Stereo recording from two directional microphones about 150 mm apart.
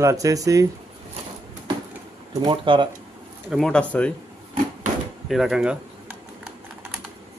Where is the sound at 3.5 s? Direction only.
5° left (ahead or behind).